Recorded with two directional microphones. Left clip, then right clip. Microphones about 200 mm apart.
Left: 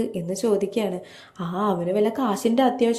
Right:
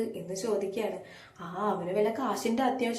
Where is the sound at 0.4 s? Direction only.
45° left (ahead or behind).